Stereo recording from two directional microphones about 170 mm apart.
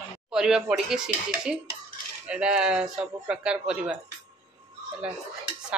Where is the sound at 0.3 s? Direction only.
5° right (ahead or behind).